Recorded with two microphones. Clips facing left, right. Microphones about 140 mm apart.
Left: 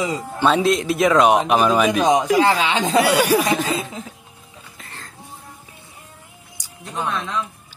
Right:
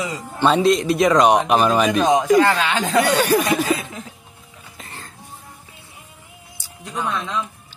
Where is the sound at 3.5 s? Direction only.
20° left (ahead or behind).